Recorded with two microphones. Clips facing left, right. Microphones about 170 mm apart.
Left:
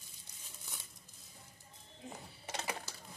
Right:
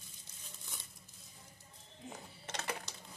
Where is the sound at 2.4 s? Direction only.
10° left (ahead or behind).